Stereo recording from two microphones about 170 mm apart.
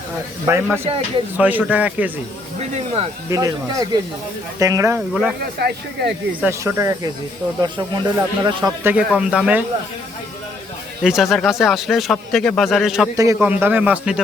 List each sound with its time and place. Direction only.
0.4 s a man's voice: 15° right (ahead or behind)
2.6 s speech: 40° right (ahead or behind)
3.2 s speech: 20° right (ahead or behind)
5.4 s speech: 70° right (ahead or behind)
6.4 s a man's voice: 15° right (ahead or behind)
8.9 s a man's voice: 5° right (ahead or behind)
11.0 s speech: centre (ahead or behind)
13.1 s a man's voice: 15° right (ahead or behind)